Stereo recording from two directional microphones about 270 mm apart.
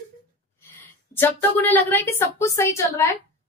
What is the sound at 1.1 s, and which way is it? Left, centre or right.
A woman's voice, centre.